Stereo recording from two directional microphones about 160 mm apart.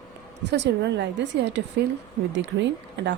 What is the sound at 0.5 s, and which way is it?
Speech, 90° right.